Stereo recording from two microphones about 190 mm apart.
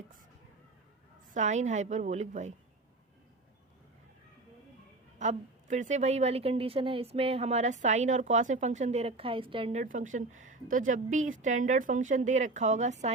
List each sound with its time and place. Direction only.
1.3 s a woman's voice: 40° right (ahead or behind)
5.2 s a woman's voice: 40° right (ahead or behind)
9.8 s a woman's voice: 45° right (ahead or behind)